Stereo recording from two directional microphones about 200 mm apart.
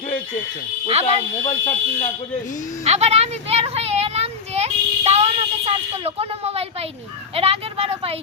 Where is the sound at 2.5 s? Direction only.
40° left (ahead or behind).